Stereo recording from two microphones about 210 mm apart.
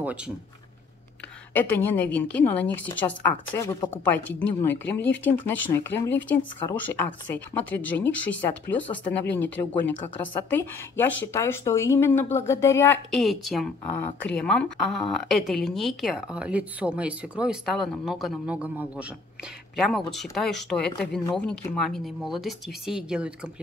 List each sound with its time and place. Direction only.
0.0 s speech: 5° right (ahead or behind)
1.5 s a woman's voice: 10° left (ahead or behind)